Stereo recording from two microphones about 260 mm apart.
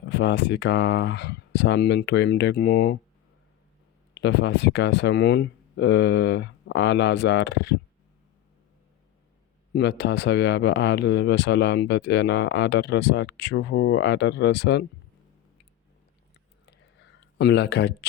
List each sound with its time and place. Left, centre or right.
0.1 s speech: left
4.1 s speech: left
9.7 s speech: left
16.6 s a sound: left